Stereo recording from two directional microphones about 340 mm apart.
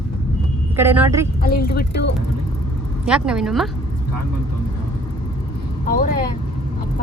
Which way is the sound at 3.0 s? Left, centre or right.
Centre.